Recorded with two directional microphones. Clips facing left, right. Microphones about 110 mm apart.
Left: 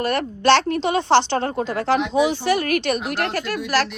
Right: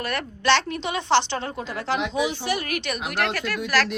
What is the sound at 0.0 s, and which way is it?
A woman's voice, 35° left (ahead or behind).